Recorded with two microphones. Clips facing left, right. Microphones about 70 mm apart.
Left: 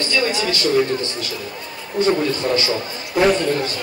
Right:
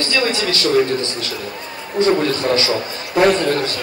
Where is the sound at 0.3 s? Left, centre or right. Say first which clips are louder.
Right 1 dB; left.